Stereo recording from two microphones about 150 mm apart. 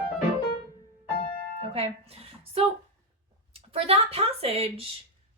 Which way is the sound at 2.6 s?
40° right (ahead or behind).